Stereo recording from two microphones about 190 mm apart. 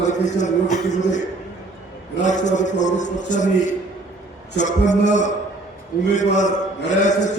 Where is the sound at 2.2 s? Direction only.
40° left (ahead or behind).